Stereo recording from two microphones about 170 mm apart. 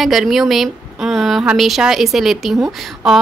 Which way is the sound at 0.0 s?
Centre (ahead or behind).